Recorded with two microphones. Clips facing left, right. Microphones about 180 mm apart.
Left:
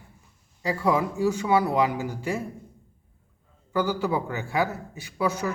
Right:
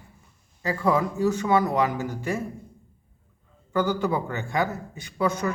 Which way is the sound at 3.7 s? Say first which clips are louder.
Right 1 dB; 10° left (ahead or behind).